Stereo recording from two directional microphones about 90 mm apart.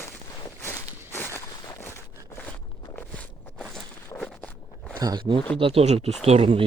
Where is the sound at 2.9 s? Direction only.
15° left (ahead or behind).